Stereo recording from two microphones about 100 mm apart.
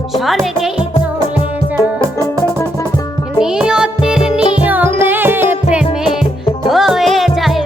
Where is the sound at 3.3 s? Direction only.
5° right (ahead or behind).